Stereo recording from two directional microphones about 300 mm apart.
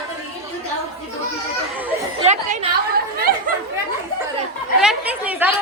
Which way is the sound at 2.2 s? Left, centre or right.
Right.